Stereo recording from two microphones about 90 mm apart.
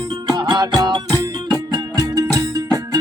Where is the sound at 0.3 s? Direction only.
55° right (ahead or behind).